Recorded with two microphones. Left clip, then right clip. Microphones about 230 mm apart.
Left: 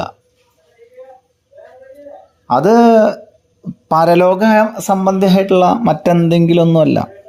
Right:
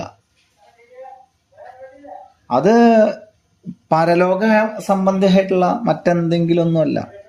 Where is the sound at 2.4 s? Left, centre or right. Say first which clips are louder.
Left 3 dB; left.